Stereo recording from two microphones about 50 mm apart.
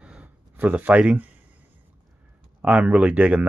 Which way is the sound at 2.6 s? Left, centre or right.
Right.